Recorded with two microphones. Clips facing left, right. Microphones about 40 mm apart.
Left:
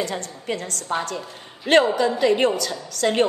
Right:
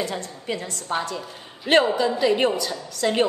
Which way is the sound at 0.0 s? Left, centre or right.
Left.